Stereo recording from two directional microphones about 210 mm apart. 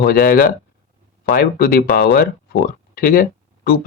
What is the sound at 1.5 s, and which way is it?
Speech, 45° left (ahead or behind).